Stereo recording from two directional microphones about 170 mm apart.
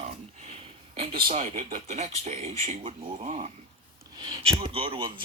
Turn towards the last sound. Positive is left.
turn(degrees=-30)  # may be behind; listen again after turning